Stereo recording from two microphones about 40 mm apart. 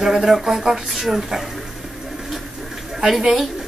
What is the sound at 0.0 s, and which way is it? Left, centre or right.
Speech, centre.